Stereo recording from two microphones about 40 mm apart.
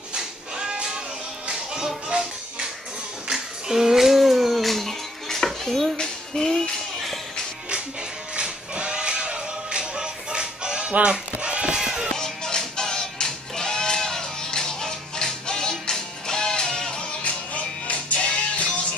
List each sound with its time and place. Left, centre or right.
0.1 s a sound: right
1.5 s music: centre
3.3 s music: centre
5.9 s music: centre
8.4 s music: right
10.9 s a sound: right
11.8 s music: centre
12.1 s music: centre
17.2 s music: left